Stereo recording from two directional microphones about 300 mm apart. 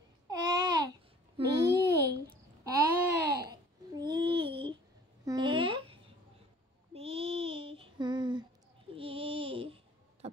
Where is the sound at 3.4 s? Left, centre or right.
Centre.